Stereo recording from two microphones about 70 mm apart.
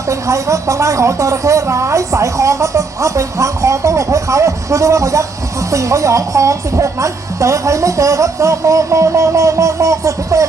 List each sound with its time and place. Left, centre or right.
0.1 s a woman's voice: right